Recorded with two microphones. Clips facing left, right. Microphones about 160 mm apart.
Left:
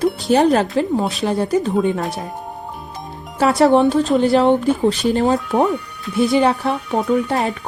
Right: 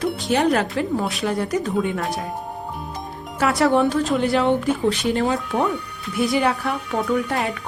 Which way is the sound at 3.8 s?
25° left (ahead or behind).